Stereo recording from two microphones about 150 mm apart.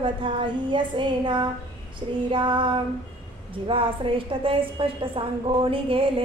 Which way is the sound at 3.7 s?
35° right (ahead or behind).